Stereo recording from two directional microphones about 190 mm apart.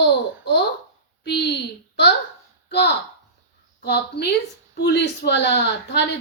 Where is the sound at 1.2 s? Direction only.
60° left (ahead or behind).